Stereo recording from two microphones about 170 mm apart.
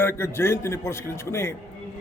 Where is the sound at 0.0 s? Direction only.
15° left (ahead or behind).